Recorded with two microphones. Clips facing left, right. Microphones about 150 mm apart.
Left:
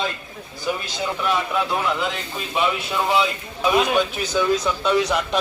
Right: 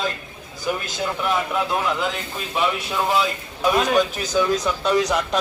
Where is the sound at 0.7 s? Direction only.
Centre (ahead or behind).